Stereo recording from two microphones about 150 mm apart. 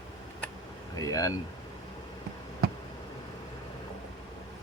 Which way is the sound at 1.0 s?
25° left (ahead or behind).